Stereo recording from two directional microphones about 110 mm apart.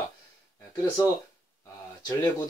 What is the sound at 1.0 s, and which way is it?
Speech, 35° left (ahead or behind).